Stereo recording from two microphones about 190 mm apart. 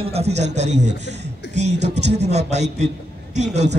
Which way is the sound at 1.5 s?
35° right (ahead or behind).